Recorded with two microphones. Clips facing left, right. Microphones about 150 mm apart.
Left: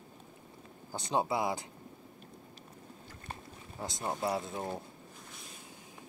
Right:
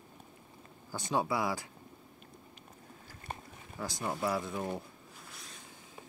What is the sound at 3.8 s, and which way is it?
Speech, 20° left (ahead or behind).